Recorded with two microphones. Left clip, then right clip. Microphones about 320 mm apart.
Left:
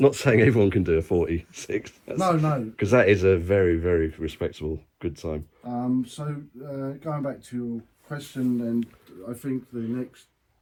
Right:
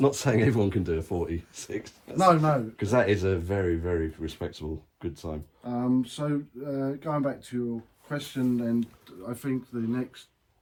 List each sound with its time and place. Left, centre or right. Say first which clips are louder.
0.0 s speech: left 5 dB; centre
2.1 s speech: right 3 dB; centre
2.7 s speech: left 5 dB; centre
5.6 s speech: even; centre
8.2 s speech: left 2 dB; centre